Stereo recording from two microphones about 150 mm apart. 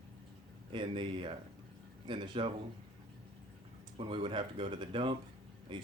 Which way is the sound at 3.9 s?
35° right (ahead or behind).